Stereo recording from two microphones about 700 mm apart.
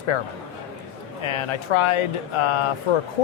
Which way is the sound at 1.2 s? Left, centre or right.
Left.